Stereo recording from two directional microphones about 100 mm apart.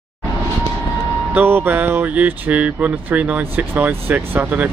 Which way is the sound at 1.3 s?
20° right (ahead or behind).